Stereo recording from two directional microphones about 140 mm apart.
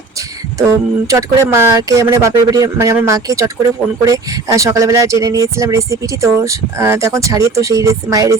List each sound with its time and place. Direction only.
0.7 s speech: 20° right (ahead or behind)